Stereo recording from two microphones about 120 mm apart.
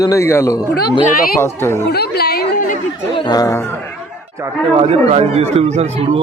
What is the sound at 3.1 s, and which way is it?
Speech, 35° left (ahead or behind).